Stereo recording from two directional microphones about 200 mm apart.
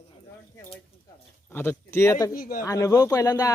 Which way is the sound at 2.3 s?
45° left (ahead or behind).